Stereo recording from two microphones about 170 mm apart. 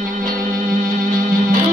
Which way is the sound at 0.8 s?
55° right (ahead or behind).